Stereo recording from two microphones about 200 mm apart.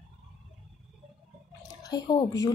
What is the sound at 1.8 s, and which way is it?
Speech, 20° left (ahead or behind).